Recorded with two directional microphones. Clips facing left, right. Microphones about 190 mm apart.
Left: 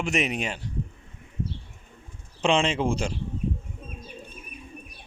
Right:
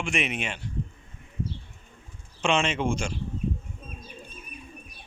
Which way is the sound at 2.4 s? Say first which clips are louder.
Left 2 dB; 30° left (ahead or behind).